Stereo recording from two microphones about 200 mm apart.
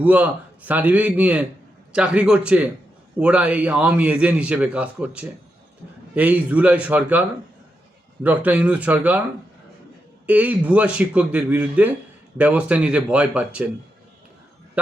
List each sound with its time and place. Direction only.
0.0 s a man's voice: 5° right (ahead or behind)
10.2 s a man's voice: 10° right (ahead or behind)